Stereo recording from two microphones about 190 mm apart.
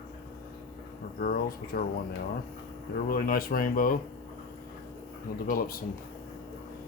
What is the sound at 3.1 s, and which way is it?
Speech, 45° left (ahead or behind).